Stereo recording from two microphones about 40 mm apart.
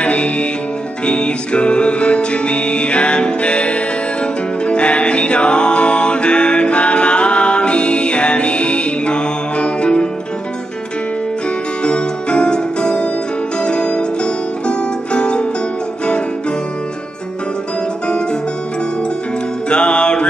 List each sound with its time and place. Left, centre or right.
0.0 s music: left
11.8 s music: left
19.7 s music: left